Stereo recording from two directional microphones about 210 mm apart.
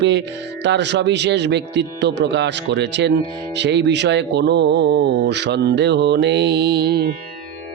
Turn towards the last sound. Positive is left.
turn(degrees=-50)  # may be behind; listen again after turning